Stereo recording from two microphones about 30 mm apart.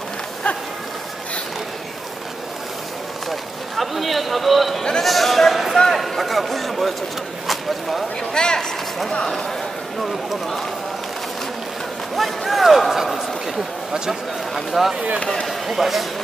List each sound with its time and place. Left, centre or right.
3.3 s speech: centre
5.0 s a sound: centre
5.9 s a man's voice: centre
8.3 s speech: left
12.2 s speech: centre
14.7 s speech: centre